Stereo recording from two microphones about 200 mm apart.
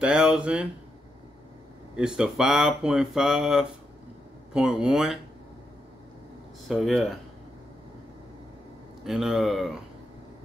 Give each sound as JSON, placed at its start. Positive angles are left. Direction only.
{"t": 0.0, "sound": "speech", "side_deg": -5}
{"t": 2.0, "sound": "speech", "side_deg": -5}
{"t": 6.7, "sound": "speech", "side_deg": 0}
{"t": 9.0, "sound": "speech", "side_deg": 0}